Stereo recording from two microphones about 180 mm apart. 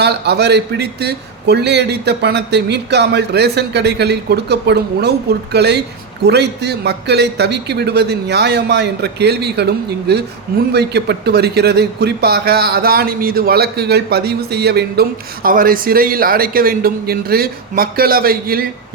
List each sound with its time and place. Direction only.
0.0 s a man's voice: 65° right (ahead or behind)
15.4 s a man's voice: 50° right (ahead or behind)